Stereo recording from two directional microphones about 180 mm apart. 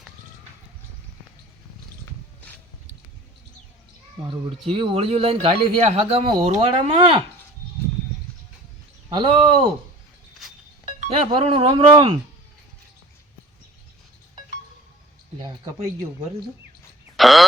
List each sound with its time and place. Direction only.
4.2 s speech: 25° right (ahead or behind)
9.0 s speech: 25° right (ahead or behind)
10.8 s speech: 35° right (ahead or behind)
17.2 s a sound: centre (ahead or behind)